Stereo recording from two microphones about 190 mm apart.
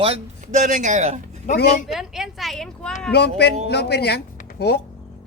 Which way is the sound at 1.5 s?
40° left (ahead or behind).